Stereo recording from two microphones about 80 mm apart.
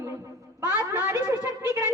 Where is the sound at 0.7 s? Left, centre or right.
Right.